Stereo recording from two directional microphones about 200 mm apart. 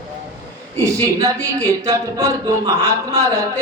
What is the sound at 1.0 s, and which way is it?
A man's voice, 15° right (ahead or behind).